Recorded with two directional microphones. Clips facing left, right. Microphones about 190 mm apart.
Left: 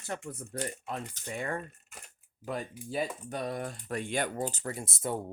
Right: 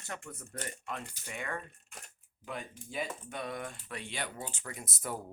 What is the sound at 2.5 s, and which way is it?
Speech, 40° left (ahead or behind).